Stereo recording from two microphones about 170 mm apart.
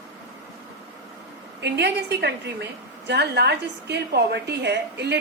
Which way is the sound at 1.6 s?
85° right.